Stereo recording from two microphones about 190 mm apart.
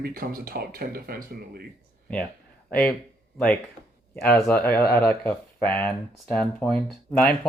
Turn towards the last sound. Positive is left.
turn(degrees=5)  # may be behind; listen again after turning